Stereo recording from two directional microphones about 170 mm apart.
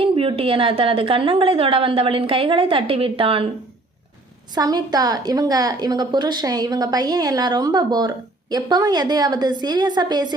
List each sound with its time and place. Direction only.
0.0 s a woman's voice: 30° right (ahead or behind)
4.5 s a woman's voice: 25° right (ahead or behind)